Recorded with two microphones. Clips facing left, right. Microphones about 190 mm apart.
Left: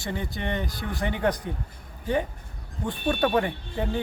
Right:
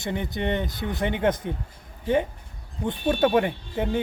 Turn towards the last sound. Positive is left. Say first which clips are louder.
# right 3 dB
turn(degrees=-20)  # may be behind; listen again after turning